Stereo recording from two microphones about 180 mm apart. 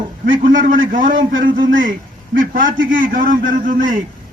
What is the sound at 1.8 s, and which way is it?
A man's voice, 50° right (ahead or behind).